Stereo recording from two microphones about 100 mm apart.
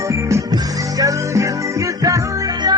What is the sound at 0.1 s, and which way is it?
Music, 30° right (ahead or behind).